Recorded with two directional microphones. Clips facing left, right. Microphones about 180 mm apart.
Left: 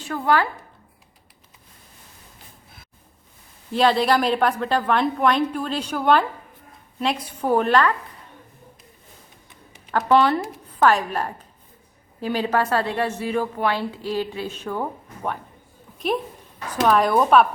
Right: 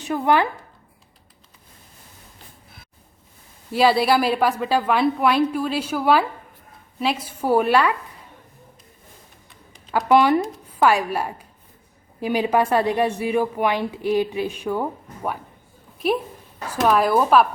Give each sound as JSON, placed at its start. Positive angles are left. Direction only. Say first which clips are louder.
{"t": 0.0, "sound": "speech", "louder": "right 2 dB", "side_deg": -20}
{"t": 3.7, "sound": "a woman's voice", "louder": "right 1 dB", "side_deg": -5}
{"t": 9.9, "sound": "a woman's voice", "louder": "right 2 dB", "side_deg": -10}
{"t": 16.8, "sound": "a woman's voice", "louder": "even", "side_deg": 0}